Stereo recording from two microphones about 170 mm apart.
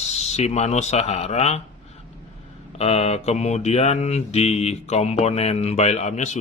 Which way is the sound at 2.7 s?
40° left (ahead or behind).